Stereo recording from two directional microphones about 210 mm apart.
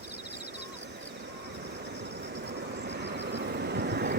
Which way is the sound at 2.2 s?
55° right (ahead or behind).